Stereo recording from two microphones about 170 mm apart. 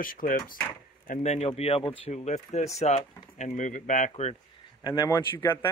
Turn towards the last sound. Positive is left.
turn(degrees=15)  # may be behind; listen again after turning